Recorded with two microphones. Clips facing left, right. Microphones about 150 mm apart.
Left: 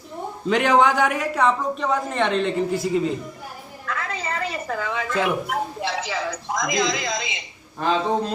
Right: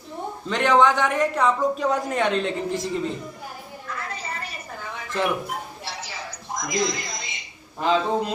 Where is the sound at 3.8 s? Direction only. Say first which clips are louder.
Left 5 dB; 90° left.